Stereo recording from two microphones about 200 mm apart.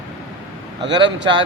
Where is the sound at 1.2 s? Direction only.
65° right (ahead or behind).